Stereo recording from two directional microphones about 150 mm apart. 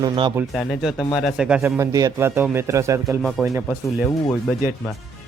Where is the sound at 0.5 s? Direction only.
Centre (ahead or behind); by 3.2 s 20° right (ahead or behind).